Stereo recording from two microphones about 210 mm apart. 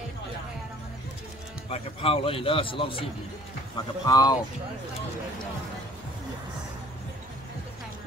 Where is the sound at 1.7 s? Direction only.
25° left (ahead or behind).